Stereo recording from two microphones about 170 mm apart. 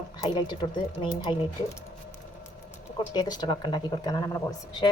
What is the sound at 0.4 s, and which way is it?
Speech, 25° left (ahead or behind).